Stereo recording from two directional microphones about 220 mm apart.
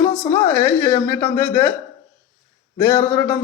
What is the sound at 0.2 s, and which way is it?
A woman's voice, 10° left (ahead or behind).